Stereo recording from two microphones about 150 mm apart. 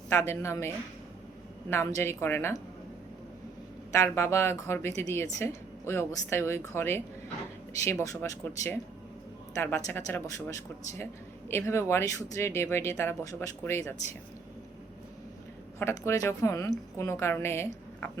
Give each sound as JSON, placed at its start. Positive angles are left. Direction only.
{"t": 0.1, "sound": "speech", "side_deg": 20}
{"t": 1.7, "sound": "speech", "side_deg": 20}
{"t": 3.9, "sound": "speech", "side_deg": 20}
{"t": 9.6, "sound": "speech", "side_deg": 15}
{"t": 15.8, "sound": "speech", "side_deg": 20}